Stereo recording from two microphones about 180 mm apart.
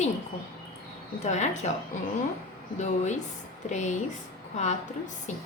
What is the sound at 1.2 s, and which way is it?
Speech, 40° left (ahead or behind).